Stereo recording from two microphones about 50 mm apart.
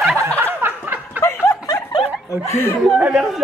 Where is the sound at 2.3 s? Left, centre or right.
Left.